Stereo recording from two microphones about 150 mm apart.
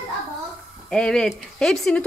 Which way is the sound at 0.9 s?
5° left (ahead or behind).